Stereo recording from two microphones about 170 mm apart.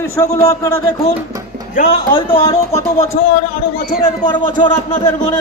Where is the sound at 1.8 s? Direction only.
55° left (ahead or behind).